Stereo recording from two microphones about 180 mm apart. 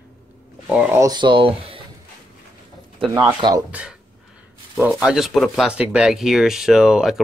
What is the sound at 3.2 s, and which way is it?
Speech, 20° right (ahead or behind).